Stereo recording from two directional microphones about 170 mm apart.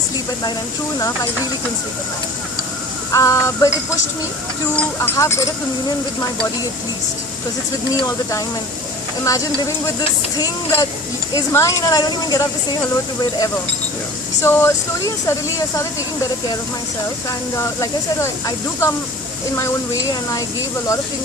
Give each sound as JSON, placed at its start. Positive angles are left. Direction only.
{"t": 0.9, "sound": "speech", "side_deg": 20}
{"t": 3.1, "sound": "speech", "side_deg": 20}
{"t": 4.8, "sound": "speech", "side_deg": 15}
{"t": 8.0, "sound": "speech", "side_deg": 20}
{"t": 14.4, "sound": "speech", "side_deg": 15}
{"t": 17.2, "sound": "speech", "side_deg": 15}